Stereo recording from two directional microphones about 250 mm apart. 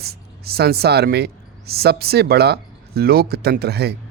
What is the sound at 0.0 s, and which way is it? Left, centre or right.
Speech, right.